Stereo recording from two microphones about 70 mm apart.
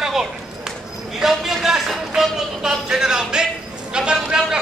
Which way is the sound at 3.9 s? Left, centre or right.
Centre.